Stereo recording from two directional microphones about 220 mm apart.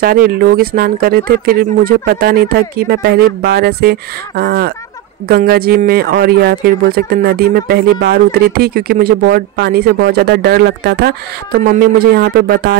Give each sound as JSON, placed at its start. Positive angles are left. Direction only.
{"t": 0.0, "sound": "speech", "side_deg": -40}